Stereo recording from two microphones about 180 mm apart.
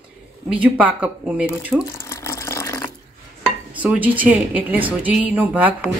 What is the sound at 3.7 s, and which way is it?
Speech, 10° right (ahead or behind).